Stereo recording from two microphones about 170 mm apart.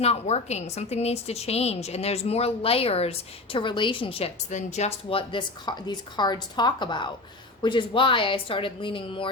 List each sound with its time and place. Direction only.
0.0 s a woman's voice: 40° left (ahead or behind)